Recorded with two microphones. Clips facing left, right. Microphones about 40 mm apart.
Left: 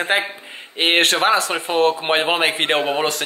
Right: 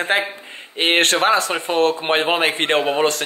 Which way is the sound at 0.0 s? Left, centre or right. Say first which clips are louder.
Even; centre.